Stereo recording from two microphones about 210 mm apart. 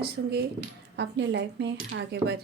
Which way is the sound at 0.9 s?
55° right (ahead or behind).